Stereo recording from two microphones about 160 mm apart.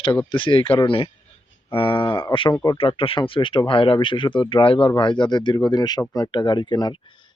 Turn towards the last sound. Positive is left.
turn(degrees=25)  # may be behind; listen again after turning